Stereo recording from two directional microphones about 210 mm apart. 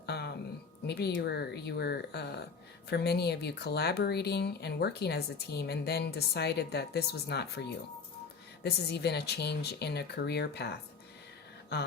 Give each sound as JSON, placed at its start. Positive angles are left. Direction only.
{"t": 0.0, "sound": "a sound", "side_deg": 50}
{"t": 0.9, "sound": "speech", "side_deg": 50}
{"t": 8.6, "sound": "speech", "side_deg": 50}